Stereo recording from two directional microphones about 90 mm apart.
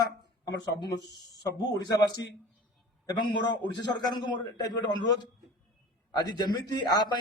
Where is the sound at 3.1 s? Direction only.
60° left (ahead or behind).